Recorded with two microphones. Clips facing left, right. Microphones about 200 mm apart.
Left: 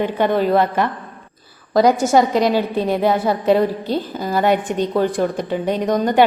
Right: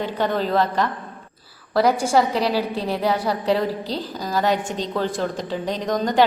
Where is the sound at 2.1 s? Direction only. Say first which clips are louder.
Left 4 dB; 20° left (ahead or behind).